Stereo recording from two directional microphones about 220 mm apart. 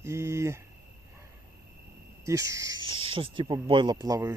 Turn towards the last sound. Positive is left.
turn(degrees=-15)  # may be behind; listen again after turning